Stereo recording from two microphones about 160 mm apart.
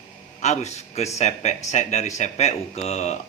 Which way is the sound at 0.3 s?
45° left (ahead or behind).